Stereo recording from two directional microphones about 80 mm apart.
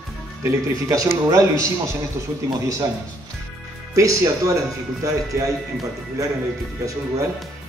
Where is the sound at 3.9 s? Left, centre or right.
Right.